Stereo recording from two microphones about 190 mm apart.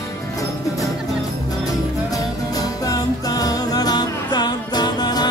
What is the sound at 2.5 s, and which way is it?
Music, 20° left (ahead or behind).